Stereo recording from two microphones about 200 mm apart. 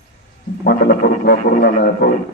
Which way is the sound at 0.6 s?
50° left (ahead or behind).